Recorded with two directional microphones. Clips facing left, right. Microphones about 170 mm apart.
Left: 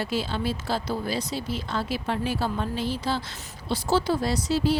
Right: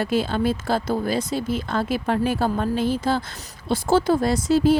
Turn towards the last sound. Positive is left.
turn(degrees=-50)  # may be behind; listen again after turning